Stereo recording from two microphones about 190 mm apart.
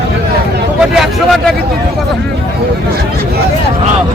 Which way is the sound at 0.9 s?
Centre (ahead or behind).